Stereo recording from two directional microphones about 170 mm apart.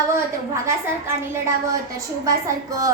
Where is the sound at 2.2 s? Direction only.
20° right (ahead or behind).